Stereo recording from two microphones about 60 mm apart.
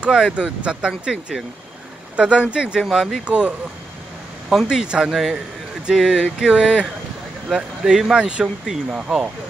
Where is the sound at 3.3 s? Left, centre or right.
Centre.